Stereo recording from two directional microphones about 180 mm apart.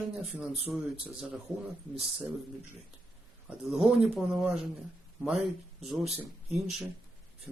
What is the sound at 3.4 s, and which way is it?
Speech, 5° right (ahead or behind).